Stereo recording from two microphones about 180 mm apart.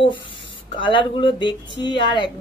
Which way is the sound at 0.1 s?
30° left (ahead or behind).